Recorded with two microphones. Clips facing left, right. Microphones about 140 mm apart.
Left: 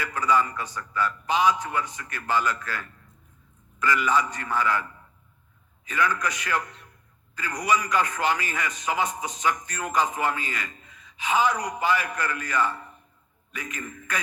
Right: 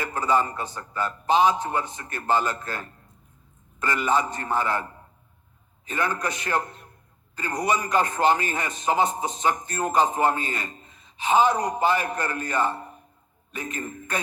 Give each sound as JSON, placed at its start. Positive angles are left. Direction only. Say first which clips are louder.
{"t": 0.0, "sound": "a man's voice", "louder": "right 1 dB", "side_deg": -30}